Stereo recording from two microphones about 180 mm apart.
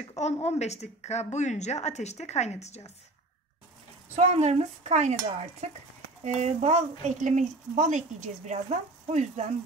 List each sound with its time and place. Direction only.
0.1 s speech: 35° left (ahead or behind)
4.1 s speech: 35° right (ahead or behind)